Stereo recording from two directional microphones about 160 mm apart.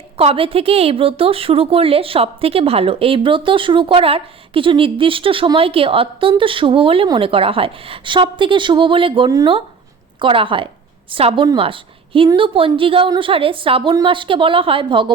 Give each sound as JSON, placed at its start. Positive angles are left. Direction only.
{"t": 0.2, "sound": "a woman's voice", "side_deg": -35}